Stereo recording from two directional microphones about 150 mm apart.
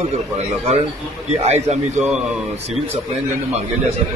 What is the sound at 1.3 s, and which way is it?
Speech, 45° right (ahead or behind).